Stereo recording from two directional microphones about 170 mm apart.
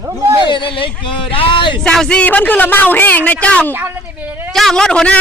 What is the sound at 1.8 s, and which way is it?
Speech, 5° left (ahead or behind).